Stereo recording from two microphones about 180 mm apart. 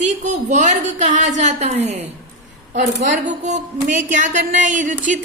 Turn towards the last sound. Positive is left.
turn(degrees=-45)  # may be behind; listen again after turning